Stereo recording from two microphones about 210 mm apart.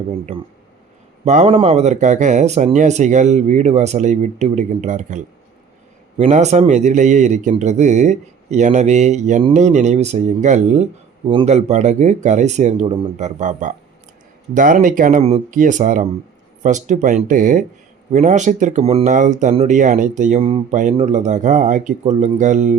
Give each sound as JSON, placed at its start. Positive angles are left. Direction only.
{"t": 0.1, "sound": "speech", "side_deg": -25}